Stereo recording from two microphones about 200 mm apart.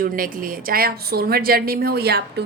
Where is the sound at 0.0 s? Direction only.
45° right (ahead or behind).